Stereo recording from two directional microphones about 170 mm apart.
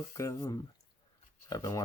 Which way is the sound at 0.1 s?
15° left (ahead or behind).